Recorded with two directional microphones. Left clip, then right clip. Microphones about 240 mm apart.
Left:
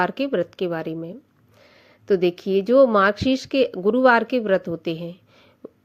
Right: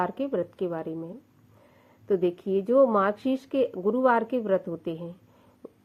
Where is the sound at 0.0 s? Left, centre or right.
Left.